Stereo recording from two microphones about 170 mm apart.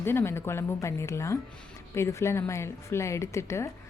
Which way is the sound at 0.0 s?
15° left (ahead or behind).